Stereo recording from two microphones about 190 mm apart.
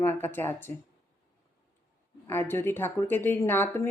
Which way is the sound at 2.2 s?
10° left (ahead or behind).